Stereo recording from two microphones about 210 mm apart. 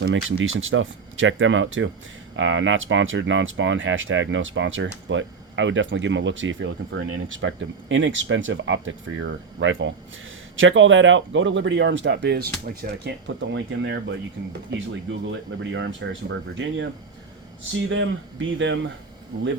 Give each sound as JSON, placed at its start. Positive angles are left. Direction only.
{"t": 0.0, "sound": "speech", "side_deg": -65}
{"t": 13.2, "sound": "speech", "side_deg": -60}
{"t": 17.8, "sound": "speech", "side_deg": -65}